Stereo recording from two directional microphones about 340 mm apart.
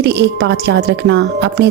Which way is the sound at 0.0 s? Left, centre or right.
Right.